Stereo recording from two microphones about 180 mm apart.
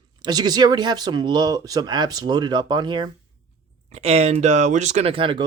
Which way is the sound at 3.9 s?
35° right (ahead or behind).